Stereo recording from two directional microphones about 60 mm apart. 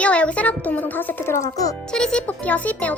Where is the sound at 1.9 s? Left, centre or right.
Centre.